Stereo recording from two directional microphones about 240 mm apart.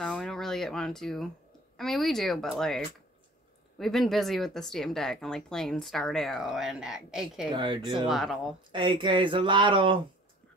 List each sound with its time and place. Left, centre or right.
0.0 s a sound: centre
1.8 s speech: centre
7.5 s speech: centre
8.1 s speech: centre
8.7 s speech: centre